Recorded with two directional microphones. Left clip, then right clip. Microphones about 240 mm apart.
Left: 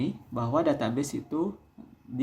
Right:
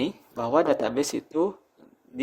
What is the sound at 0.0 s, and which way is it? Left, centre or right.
Speech, right.